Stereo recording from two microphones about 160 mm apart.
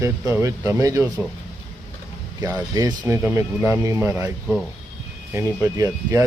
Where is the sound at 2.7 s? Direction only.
20° right (ahead or behind).